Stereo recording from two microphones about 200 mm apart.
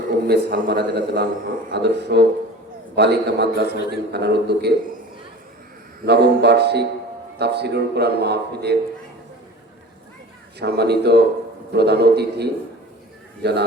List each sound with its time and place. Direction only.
0.3 s a man's voice: 55° right (ahead or behind)
6.1 s a man's voice: 55° right (ahead or behind)
10.6 s a man's voice: 55° right (ahead or behind)